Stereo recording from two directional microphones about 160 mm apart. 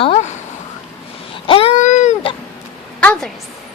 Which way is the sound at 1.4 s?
35° left (ahead or behind).